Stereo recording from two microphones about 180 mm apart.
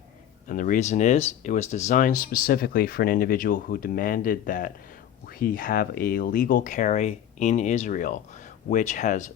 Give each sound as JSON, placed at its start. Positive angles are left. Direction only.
{"t": 0.4, "sound": "speech", "side_deg": 45}